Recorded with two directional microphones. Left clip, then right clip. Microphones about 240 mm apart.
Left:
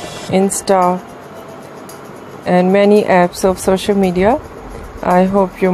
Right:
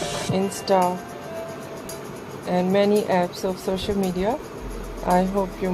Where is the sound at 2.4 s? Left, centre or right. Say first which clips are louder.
Left 9 dB; left.